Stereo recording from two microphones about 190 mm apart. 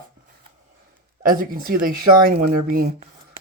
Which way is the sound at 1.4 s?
50° right (ahead or behind).